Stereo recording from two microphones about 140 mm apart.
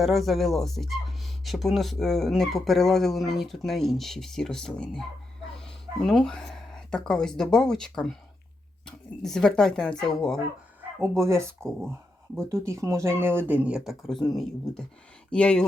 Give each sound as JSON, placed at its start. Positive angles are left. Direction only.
{"t": 0.0, "sound": "speech", "side_deg": 0}
{"t": 11.2, "sound": "speech", "side_deg": -20}
{"t": 12.5, "sound": "speech", "side_deg": -20}